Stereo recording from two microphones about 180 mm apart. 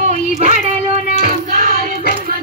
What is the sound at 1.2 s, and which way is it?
Child singing, 50° right (ahead or behind).